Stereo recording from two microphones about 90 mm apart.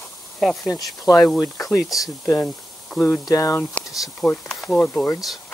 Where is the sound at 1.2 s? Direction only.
25° left (ahead or behind).